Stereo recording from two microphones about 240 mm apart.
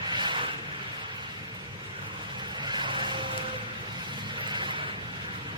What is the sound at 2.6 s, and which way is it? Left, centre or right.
Vehicle, centre.